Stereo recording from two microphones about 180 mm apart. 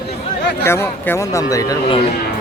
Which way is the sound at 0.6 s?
15° left (ahead or behind).